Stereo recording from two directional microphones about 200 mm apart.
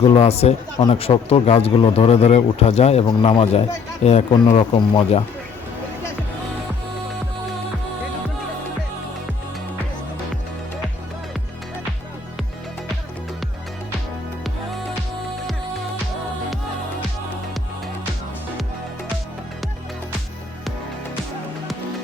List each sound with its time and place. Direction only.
0.0 s a man's voice: 30° left (ahead or behind)